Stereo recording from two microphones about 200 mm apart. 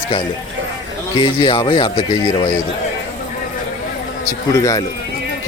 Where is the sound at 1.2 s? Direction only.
25° left (ahead or behind).